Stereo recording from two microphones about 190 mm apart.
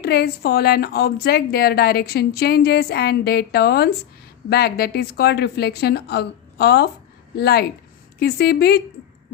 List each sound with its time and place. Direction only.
0.0 s speech: 55° left (ahead or behind)